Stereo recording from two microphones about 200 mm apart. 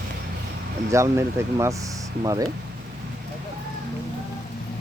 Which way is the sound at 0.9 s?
15° right (ahead or behind).